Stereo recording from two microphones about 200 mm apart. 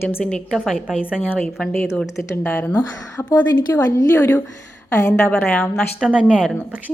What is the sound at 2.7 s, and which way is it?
A woman's voice, 20° left (ahead or behind).